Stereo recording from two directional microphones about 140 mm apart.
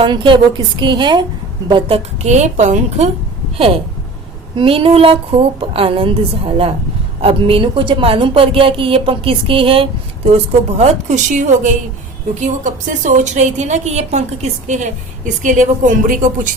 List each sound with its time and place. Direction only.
0.0 s a woman's voice: 35° right (ahead or behind)
2.1 s a woman's voice: 55° right (ahead or behind)
4.5 s a woman's voice: 40° right (ahead or behind)
14.7 s a woman's voice: 65° right (ahead or behind)